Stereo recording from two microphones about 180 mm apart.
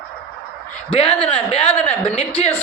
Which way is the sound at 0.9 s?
35° left (ahead or behind).